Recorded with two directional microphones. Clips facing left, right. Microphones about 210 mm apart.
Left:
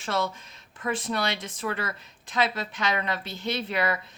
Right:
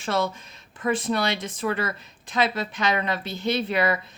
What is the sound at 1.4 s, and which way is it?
Speech, 25° right (ahead or behind).